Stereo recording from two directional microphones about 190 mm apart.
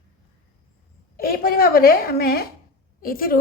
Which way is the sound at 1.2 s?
50° left (ahead or behind).